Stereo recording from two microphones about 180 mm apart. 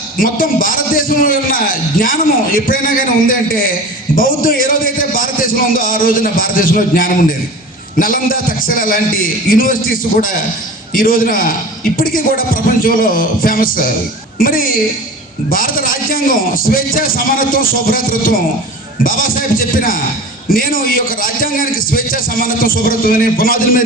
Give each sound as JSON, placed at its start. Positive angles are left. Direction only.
{"t": 0.2, "sound": "a man's voice", "side_deg": 50}
{"t": 10.9, "sound": "a man's voice", "side_deg": 50}